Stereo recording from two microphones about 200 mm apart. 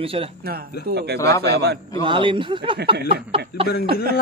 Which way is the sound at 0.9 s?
55° right (ahead or behind).